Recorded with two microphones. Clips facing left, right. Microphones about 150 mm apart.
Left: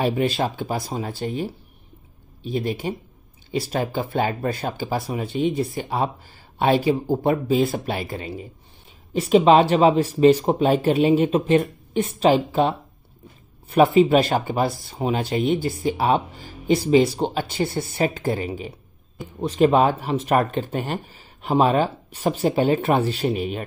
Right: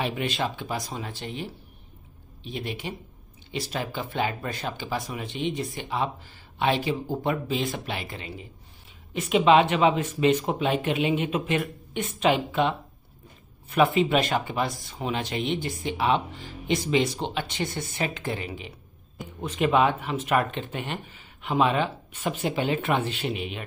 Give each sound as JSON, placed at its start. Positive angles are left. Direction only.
{"t": 0.0, "sound": "speech", "side_deg": 35}
{"t": 2.5, "sound": "speech", "side_deg": 40}